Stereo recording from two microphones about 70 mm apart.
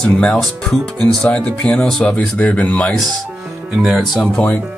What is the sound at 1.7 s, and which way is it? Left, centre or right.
Speech, centre.